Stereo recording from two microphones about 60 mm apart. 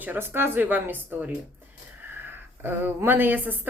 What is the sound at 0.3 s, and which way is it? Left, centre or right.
A woman's voice, right.